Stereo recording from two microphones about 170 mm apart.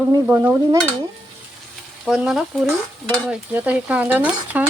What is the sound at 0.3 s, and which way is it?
Stir, 15° right (ahead or behind).